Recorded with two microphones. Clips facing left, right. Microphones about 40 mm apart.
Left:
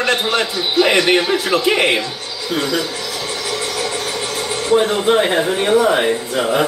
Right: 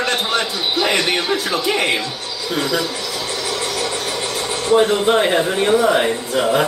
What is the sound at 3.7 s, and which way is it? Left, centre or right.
Vehicle, left.